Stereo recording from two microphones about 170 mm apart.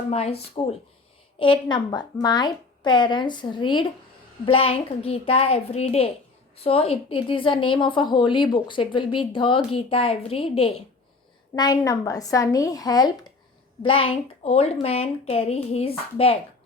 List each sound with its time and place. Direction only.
0.1 s a woman's voice: 35° left (ahead or behind)
11.5 s a woman's voice: 25° left (ahead or behind)
13.8 s a woman's voice: 30° left (ahead or behind)